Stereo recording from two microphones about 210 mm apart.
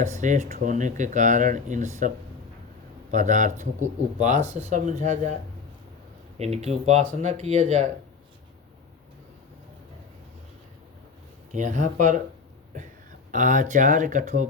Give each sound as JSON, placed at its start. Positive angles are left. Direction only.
{"t": 0.0, "sound": "speech", "side_deg": -35}
{"t": 6.4, "sound": "speech", "side_deg": -30}
{"t": 11.5, "sound": "speech", "side_deg": -35}
{"t": 13.3, "sound": "speech", "side_deg": -40}